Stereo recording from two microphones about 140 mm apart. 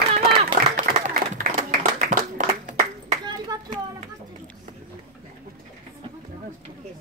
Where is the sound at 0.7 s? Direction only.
60° right (ahead or behind).